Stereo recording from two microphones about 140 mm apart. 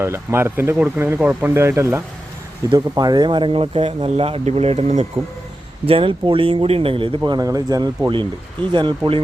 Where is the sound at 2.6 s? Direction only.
30° right (ahead or behind); by 5.0 s 50° right (ahead or behind).